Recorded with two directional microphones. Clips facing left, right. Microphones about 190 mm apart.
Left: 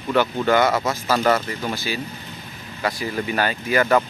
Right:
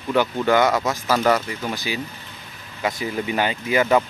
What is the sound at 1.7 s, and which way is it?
Speech, 15° right (ahead or behind).